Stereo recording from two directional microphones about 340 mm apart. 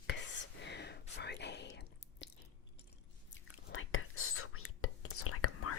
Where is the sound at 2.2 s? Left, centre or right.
Left.